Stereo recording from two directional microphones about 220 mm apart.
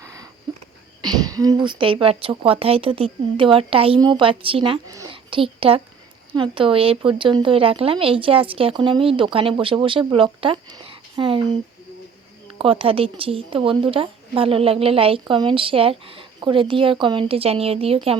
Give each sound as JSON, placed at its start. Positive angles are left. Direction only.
{"t": 0.0, "sound": "a sound", "side_deg": -15}
{"t": 1.0, "sound": "a woman's voice", "side_deg": -15}
{"t": 12.5, "sound": "a woman's voice", "side_deg": -25}